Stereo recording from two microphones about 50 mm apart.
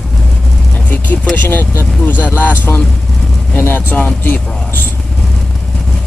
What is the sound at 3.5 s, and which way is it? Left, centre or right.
Speech, left.